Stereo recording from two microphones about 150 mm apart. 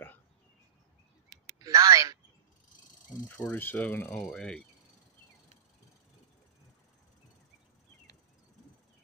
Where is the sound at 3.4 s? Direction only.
10° left (ahead or behind).